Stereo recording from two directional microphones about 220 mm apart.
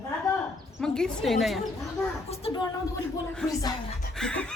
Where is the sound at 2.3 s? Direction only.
25° left (ahead or behind).